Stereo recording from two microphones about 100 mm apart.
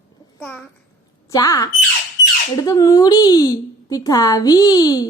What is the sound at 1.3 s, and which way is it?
A woman's voice, 35° left (ahead or behind).